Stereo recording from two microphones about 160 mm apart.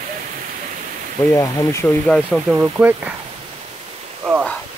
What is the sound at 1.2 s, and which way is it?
Speech, 15° left (ahead or behind).